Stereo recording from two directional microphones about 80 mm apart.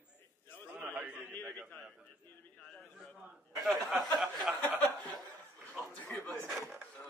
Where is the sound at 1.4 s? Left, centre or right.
Right.